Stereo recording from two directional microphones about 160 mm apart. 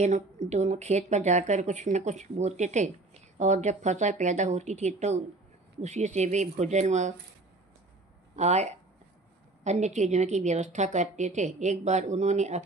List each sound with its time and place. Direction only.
0.0 s a woman's voice: 45° right (ahead or behind)
8.4 s a woman's voice: 45° right (ahead or behind)